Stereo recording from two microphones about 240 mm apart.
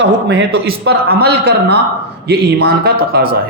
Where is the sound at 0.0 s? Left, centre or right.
Right.